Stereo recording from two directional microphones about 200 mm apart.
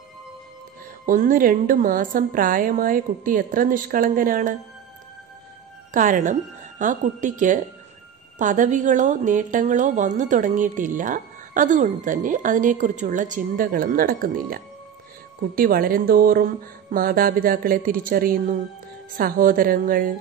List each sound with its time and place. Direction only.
1.0 s a woman's voice: 40° right (ahead or behind)
5.9 s a woman's voice: 40° right (ahead or behind)